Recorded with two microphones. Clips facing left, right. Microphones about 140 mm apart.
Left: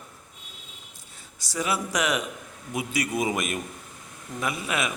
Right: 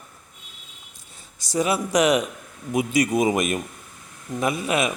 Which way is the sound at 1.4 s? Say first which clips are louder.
Right 6 dB; 20° right (ahead or behind).